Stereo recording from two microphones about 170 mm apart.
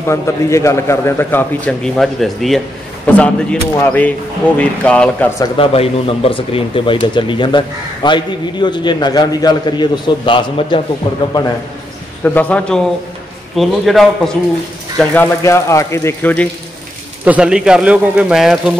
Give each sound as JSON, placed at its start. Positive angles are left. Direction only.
{"t": 0.0, "sound": "a man's voice", "side_deg": 15}
{"t": 5.4, "sound": "speech", "side_deg": 35}
{"t": 12.2, "sound": "a man's voice", "side_deg": 10}
{"t": 15.4, "sound": "a man's voice", "side_deg": 15}
{"t": 17.2, "sound": "a man's voice", "side_deg": -5}